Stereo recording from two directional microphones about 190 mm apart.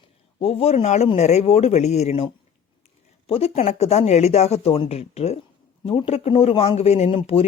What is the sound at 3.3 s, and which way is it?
Speech, 30° left (ahead or behind).